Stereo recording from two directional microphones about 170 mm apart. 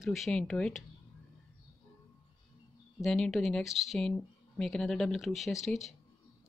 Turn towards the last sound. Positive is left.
turn(degrees=0)  # may be behind; listen again after turning